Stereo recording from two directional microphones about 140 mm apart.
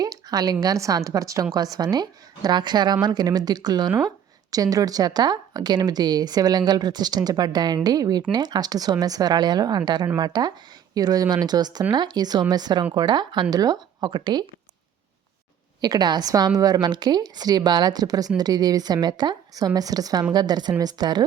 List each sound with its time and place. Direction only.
0.0 s speech: 25° right (ahead or behind)
15.8 s speech: 30° right (ahead or behind)